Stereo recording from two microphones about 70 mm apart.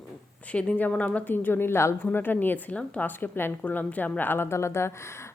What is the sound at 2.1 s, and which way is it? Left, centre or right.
A woman's voice, left.